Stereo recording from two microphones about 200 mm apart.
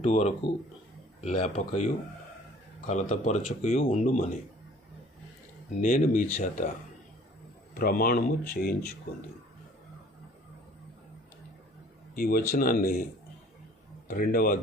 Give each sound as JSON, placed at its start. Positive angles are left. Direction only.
{"t": 0.0, "sound": "speech", "side_deg": 35}
{"t": 5.8, "sound": "speech", "side_deg": 40}
{"t": 7.8, "sound": "speech", "side_deg": 45}
{"t": 12.1, "sound": "speech", "side_deg": 45}
{"t": 14.1, "sound": "speech", "side_deg": 45}